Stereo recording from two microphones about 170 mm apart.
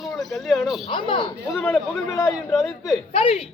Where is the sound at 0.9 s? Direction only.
30° left (ahead or behind).